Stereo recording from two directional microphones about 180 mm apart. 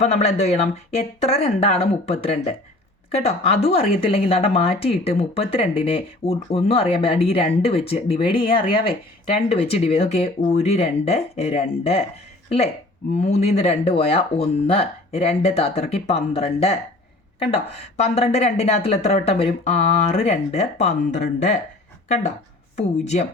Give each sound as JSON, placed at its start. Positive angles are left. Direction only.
{"t": 0.0, "sound": "speech", "side_deg": 35}